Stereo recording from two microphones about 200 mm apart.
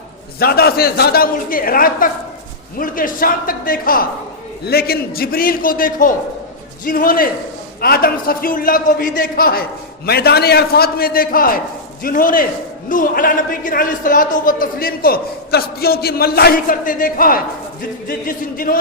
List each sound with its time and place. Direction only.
0.3 s a man's voice: 50° left (ahead or behind)